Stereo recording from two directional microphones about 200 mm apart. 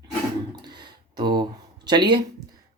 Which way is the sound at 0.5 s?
20° right (ahead or behind).